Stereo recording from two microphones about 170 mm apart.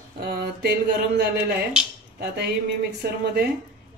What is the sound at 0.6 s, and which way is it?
Music, 75° right (ahead or behind).